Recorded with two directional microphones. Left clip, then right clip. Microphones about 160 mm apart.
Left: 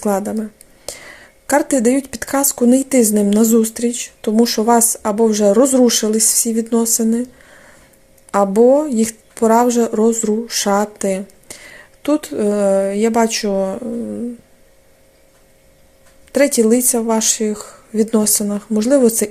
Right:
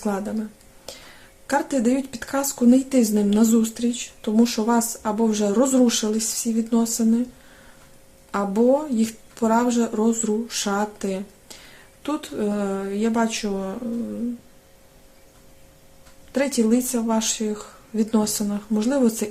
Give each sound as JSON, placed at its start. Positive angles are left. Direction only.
{"t": 0.0, "sound": "speech", "side_deg": 40}
{"t": 8.3, "sound": "speech", "side_deg": 45}
{"t": 16.3, "sound": "speech", "side_deg": 40}